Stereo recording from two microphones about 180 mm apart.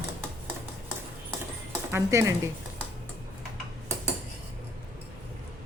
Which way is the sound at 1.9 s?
15° right (ahead or behind).